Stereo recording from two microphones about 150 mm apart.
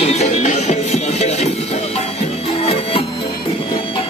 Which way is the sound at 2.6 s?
40° left (ahead or behind).